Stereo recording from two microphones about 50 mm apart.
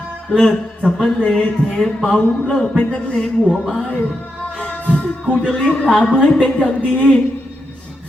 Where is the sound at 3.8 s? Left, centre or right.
Left.